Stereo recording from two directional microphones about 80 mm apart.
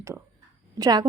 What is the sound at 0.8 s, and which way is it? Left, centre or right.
Speech, right.